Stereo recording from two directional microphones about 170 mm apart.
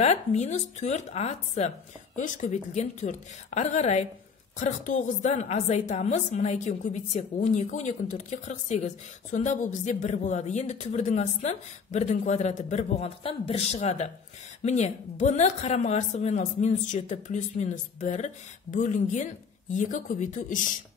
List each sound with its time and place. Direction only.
0.0 s a woman's voice: 40° left (ahead or behind)